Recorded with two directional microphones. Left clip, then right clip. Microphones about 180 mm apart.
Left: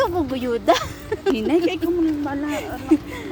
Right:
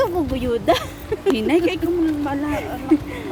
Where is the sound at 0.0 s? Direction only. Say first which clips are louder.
Right 1 dB; 20° left (ahead or behind).